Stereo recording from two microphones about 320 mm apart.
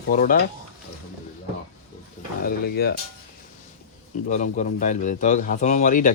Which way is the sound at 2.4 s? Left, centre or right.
Left.